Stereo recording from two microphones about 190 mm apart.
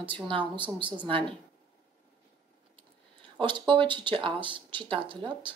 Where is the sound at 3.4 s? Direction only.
25° right (ahead or behind).